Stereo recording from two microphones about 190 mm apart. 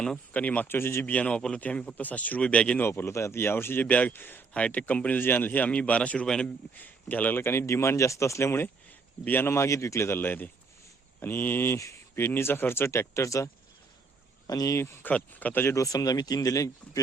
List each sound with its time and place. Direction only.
0.0 s speech: 5° left (ahead or behind)